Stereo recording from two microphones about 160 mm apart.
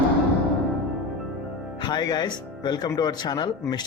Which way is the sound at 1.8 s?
25° left (ahead or behind).